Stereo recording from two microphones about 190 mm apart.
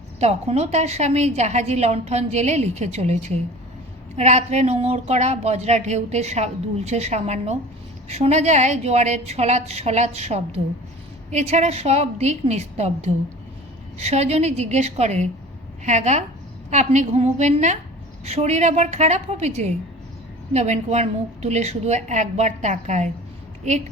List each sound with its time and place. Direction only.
0.2 s speech: 35° right (ahead or behind)